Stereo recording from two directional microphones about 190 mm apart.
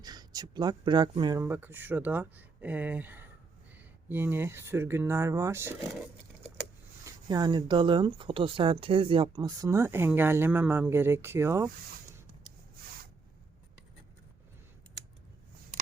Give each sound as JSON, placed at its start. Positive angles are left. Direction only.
{"t": 0.0, "sound": "speech", "side_deg": -20}
{"t": 7.0, "sound": "speech", "side_deg": -20}